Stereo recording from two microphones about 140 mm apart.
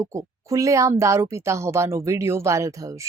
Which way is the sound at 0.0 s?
20° right (ahead or behind).